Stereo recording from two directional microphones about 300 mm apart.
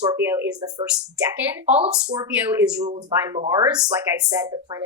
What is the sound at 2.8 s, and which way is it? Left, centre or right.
Speech, centre.